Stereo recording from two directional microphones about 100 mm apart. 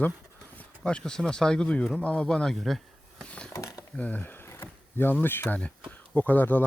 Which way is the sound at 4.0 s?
15° left (ahead or behind).